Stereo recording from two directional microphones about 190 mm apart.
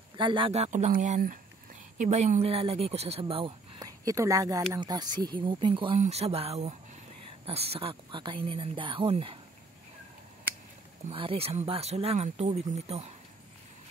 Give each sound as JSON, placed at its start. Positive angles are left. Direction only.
{"t": 0.2, "sound": "speech", "side_deg": -25}
{"t": 11.1, "sound": "speech", "side_deg": -30}